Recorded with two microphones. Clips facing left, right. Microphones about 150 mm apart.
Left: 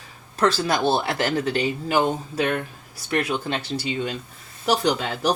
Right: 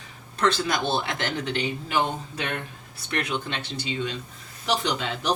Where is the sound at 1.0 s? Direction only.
35° left (ahead or behind).